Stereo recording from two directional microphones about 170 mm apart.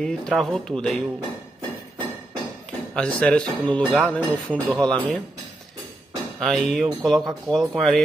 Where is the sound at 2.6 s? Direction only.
5° left (ahead or behind).